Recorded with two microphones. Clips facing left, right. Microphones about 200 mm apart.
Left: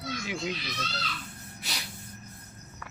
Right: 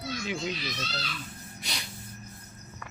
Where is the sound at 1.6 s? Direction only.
5° left (ahead or behind).